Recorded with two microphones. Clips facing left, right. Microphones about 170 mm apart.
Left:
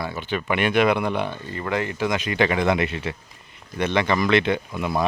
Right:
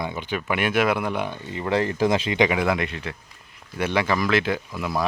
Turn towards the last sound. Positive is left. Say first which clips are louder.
# left 2 dB
turn(degrees=0)  # may be behind; listen again after turning